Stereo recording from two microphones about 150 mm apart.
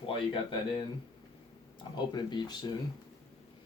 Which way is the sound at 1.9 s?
30° left (ahead or behind).